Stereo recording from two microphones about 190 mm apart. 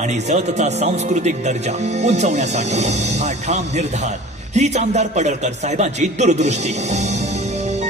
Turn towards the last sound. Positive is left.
turn(degrees=-35)  # may be behind; listen again after turning